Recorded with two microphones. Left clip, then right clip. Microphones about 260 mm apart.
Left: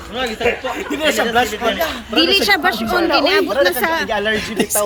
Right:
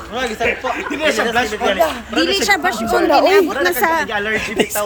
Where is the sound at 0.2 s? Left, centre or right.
Centre.